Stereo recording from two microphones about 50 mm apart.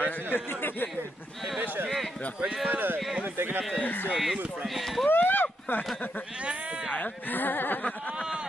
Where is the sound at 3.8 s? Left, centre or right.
Left.